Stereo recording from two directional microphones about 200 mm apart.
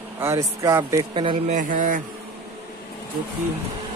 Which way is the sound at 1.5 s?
40° right (ahead or behind).